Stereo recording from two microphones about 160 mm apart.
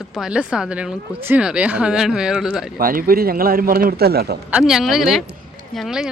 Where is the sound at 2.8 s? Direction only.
65° right (ahead or behind).